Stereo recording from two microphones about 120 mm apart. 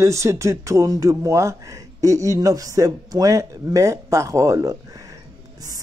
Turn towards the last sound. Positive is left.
turn(degrees=-25)  # may be behind; listen again after turning